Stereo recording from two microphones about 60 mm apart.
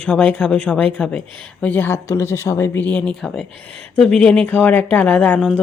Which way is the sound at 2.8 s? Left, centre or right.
Left.